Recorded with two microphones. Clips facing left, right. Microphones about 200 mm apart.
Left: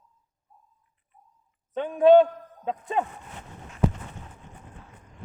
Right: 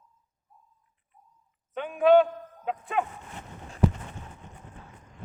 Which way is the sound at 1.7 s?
30° left (ahead or behind).